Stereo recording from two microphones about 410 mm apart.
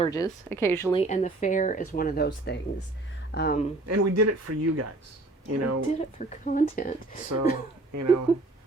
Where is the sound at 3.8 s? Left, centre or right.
Right.